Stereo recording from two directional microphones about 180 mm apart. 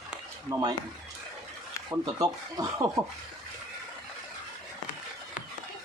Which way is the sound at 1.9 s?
20° right (ahead or behind).